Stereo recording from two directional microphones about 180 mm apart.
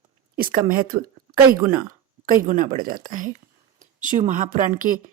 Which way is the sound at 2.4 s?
45° right (ahead or behind).